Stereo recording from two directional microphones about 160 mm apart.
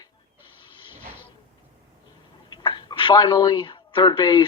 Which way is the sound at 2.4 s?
25° left (ahead or behind).